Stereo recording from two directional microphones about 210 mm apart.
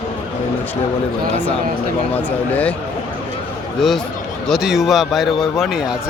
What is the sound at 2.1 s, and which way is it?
Speech, 10° left (ahead or behind).